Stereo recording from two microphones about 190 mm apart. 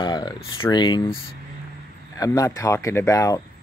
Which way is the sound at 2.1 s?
20° left (ahead or behind).